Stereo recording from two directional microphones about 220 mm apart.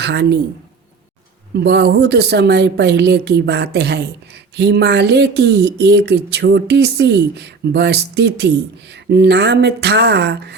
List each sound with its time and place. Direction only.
0.0 s speech: 50° right (ahead or behind)
1.5 s speech: 50° right (ahead or behind)